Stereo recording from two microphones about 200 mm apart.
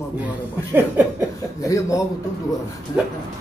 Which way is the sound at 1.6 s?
15° left (ahead or behind).